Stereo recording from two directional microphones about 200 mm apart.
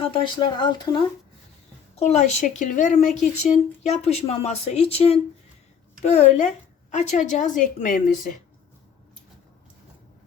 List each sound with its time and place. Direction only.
0.0 s speech: 25° left (ahead or behind)
2.0 s speech: 35° left (ahead or behind)